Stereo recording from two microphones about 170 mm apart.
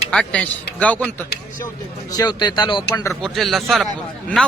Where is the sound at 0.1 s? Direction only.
5° left (ahead or behind).